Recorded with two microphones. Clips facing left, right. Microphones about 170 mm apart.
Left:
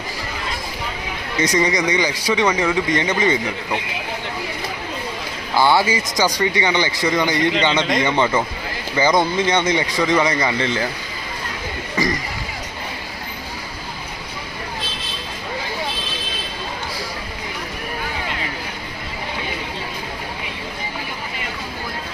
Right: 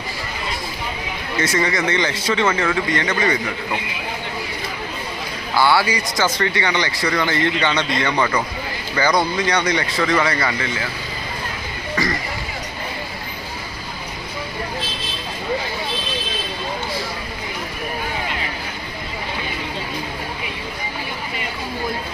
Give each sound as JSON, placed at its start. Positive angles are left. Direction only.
{"t": 1.4, "sound": "speech", "side_deg": 20}
{"t": 5.5, "sound": "speech", "side_deg": 20}
{"t": 11.9, "sound": "speech", "side_deg": 20}